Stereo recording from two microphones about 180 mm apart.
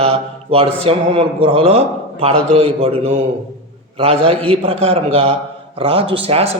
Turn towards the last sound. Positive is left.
turn(degrees=-35)  # may be behind; listen again after turning